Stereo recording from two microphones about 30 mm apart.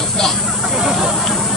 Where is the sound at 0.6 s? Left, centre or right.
Centre.